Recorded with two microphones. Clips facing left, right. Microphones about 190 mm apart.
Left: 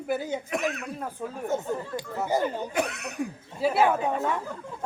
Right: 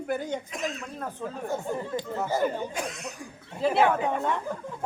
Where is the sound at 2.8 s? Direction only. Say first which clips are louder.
Left 6 dB; 65° left (ahead or behind).